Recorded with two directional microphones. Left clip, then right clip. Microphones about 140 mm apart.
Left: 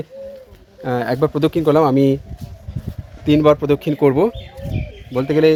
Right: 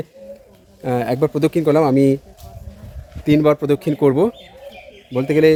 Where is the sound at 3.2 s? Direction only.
25° right (ahead or behind).